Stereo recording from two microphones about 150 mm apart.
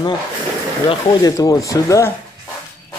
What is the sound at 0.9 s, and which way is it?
Speech, 35° left (ahead or behind).